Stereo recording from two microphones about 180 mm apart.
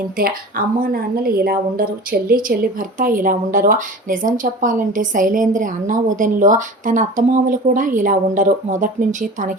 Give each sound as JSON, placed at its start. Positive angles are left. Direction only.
{"t": 0.2, "sound": "a woman's voice", "side_deg": -55}